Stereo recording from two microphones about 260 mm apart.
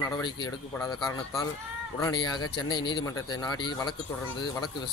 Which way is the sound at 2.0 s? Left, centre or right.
Centre.